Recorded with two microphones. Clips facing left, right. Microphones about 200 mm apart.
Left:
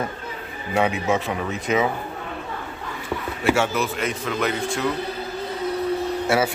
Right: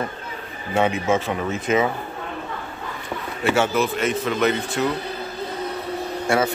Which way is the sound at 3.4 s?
Centre (ahead or behind).